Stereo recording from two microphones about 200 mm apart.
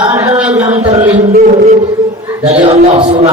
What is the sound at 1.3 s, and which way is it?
Speech, 45° right (ahead or behind).